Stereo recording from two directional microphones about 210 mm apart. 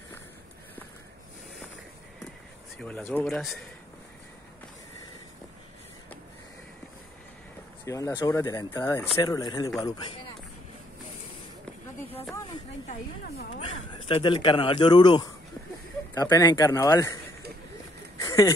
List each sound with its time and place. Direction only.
2.8 s speech: 5° left (ahead or behind)
7.8 s speech: 15° left (ahead or behind)
13.5 s speech: 25° left (ahead or behind)
18.2 s a sound: 15° left (ahead or behind)